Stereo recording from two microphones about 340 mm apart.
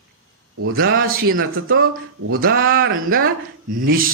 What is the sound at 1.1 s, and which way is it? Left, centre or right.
Speech, right.